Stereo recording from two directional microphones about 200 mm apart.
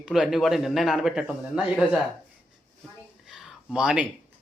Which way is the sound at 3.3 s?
5° right (ahead or behind).